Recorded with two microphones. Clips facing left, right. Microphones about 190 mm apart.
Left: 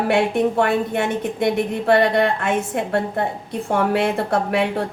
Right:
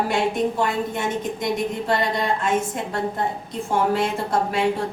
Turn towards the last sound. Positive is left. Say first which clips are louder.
# left 2 dB
turn(degrees=60)  # may be behind; listen again after turning